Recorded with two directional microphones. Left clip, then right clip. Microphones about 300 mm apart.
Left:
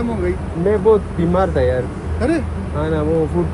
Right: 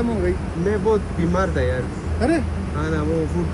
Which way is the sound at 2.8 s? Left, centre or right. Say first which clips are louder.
Left 5 dB; centre.